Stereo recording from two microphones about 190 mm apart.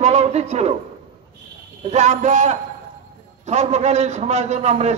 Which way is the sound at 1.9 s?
35° right (ahead or behind).